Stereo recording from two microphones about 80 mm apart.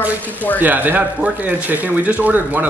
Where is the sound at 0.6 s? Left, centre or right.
Right.